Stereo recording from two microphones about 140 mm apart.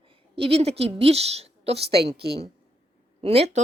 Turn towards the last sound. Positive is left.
turn(degrees=-45)  # may be behind; listen again after turning